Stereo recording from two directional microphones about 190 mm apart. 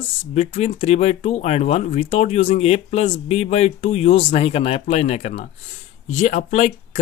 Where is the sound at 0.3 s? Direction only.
35° left (ahead or behind).